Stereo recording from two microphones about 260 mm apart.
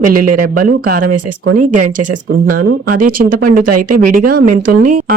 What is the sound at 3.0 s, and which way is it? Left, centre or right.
Speech, right.